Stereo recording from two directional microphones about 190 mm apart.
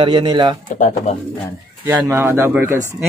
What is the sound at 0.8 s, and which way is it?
Speech, 35° left (ahead or behind).